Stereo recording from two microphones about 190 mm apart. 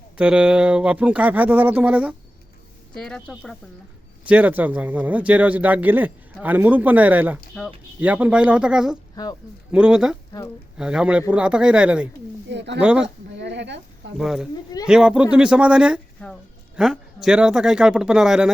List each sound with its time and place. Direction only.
0.2 s speech: 5° right (ahead or behind)
7.6 s speech: 5° left (ahead or behind)
8.0 s speech: 5° right (ahead or behind)
9.2 s speech: 20° left (ahead or behind)
9.7 s speech: 5° right (ahead or behind)
12.5 s speech: 65° right (ahead or behind)
12.8 s speech: 5° right (ahead or behind)
13.3 s a sound: 65° right (ahead or behind)
14.2 s speech: 5° right (ahead or behind)